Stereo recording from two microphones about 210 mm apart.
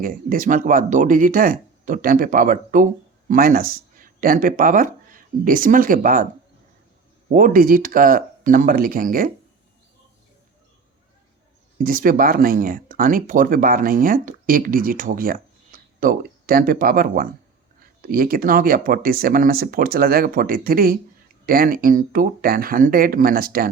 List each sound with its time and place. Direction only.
0.0 s speech: 40° right (ahead or behind)
7.3 s speech: 40° right (ahead or behind)
11.8 s speech: 40° right (ahead or behind)